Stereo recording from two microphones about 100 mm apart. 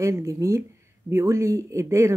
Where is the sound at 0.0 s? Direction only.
25° right (ahead or behind).